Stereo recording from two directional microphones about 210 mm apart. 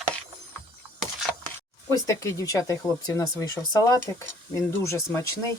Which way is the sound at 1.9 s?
15° left (ahead or behind).